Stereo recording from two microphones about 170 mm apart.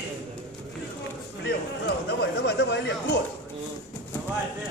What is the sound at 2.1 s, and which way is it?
Speech, 85° left.